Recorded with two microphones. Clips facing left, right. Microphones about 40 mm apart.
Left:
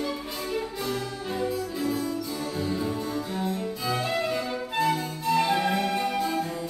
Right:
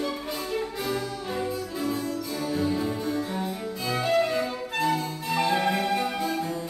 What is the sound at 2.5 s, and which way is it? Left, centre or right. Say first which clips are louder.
Music: right 3 dB; centre.